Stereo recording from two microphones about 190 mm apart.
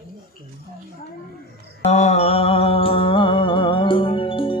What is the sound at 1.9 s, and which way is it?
Music, 35° left (ahead or behind).